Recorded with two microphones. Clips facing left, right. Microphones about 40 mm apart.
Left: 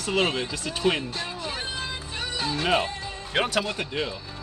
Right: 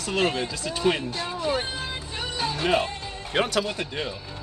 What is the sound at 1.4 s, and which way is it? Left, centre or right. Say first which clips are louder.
Music: right 5 dB; centre.